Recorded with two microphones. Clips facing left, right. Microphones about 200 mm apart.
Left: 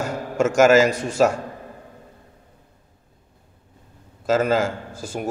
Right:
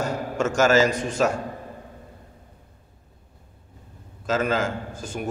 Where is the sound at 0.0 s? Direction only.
10° left (ahead or behind).